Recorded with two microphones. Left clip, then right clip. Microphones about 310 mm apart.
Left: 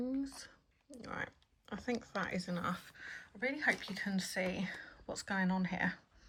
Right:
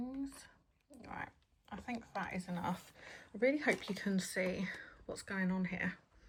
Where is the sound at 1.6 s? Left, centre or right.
Centre.